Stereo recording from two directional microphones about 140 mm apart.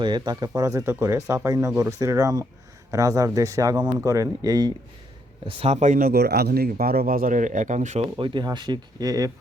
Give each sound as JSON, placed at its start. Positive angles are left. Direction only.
{"t": 0.0, "sound": "speech", "side_deg": -30}
{"t": 5.5, "sound": "speech", "side_deg": -45}
{"t": 8.1, "sound": "speech", "side_deg": -35}